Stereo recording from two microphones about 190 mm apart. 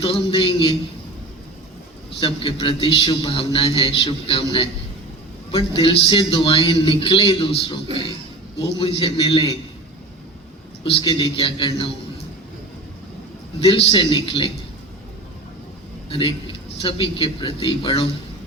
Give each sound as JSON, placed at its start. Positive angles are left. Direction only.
{"t": 0.0, "sound": "a man's voice", "side_deg": 30}
{"t": 2.2, "sound": "a man's voice", "side_deg": 30}
{"t": 8.8, "sound": "a man's voice", "side_deg": 30}
{"t": 10.8, "sound": "a man's voice", "side_deg": 25}
{"t": 13.6, "sound": "a man's voice", "side_deg": 30}
{"t": 16.0, "sound": "a man's voice", "side_deg": 25}